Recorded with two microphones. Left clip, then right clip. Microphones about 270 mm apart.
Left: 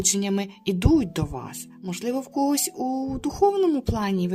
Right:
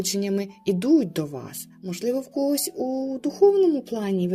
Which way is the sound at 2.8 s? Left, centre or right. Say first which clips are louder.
Even; left.